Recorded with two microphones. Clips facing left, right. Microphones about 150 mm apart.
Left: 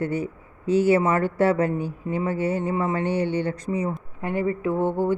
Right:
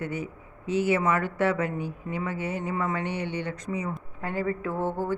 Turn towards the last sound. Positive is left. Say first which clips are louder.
# left 6 dB
turn(degrees=20)  # may be behind; listen again after turning